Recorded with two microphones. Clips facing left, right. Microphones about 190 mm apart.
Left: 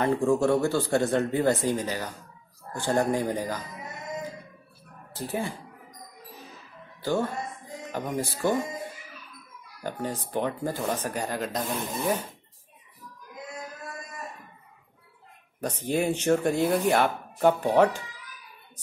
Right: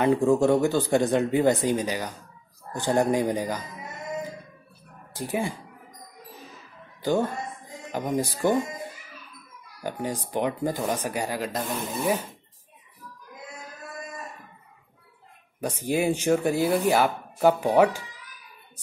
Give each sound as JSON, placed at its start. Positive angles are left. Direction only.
{"t": 0.0, "sound": "speech", "side_deg": -20}
{"t": 5.1, "sound": "speech", "side_deg": -15}
{"t": 7.0, "sound": "speech", "side_deg": -15}
{"t": 9.8, "sound": "speech", "side_deg": -10}
{"t": 15.6, "sound": "speech", "side_deg": -10}